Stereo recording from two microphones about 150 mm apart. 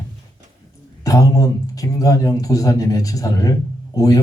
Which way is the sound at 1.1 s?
20° left (ahead or behind).